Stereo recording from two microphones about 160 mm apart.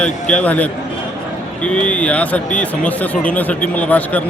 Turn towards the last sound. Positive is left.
turn(degrees=10)  # may be behind; listen again after turning